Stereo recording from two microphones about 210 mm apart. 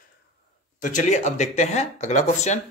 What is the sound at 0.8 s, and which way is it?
Speech, 35° left (ahead or behind).